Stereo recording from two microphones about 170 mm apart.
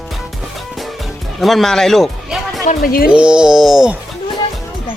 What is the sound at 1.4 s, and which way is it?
Speech, centre (ahead or behind).